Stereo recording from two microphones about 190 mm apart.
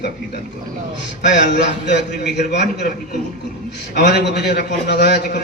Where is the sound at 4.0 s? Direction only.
60° left (ahead or behind).